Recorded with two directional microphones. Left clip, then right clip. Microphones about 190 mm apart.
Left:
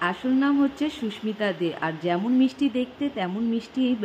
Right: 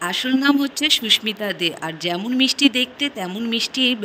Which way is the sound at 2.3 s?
55° right (ahead or behind).